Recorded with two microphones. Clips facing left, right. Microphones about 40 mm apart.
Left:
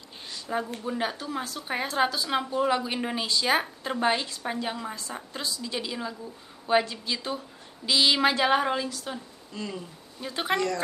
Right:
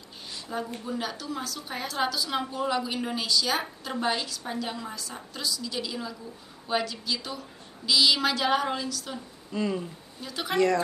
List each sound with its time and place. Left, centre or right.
0.5 s a woman's voice: left
0.8 s a woman's voice: left
9.5 s speech: centre
10.2 s a woman's voice: left